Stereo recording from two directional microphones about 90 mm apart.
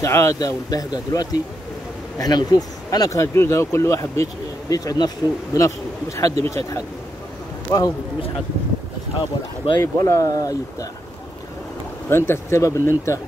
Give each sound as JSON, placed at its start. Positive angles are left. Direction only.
{"t": 0.0, "sound": "speech", "side_deg": 35}
{"t": 6.1, "sound": "speech", "side_deg": 30}
{"t": 9.6, "sound": "speech", "side_deg": 90}
{"t": 10.0, "sound": "speech", "side_deg": 35}
{"t": 12.1, "sound": "speech", "side_deg": 30}